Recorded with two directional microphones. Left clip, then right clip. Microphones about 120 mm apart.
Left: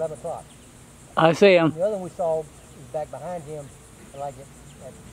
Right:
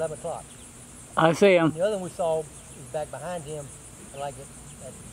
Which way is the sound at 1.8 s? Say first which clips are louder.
Left 1 dB; 20° right (ahead or behind).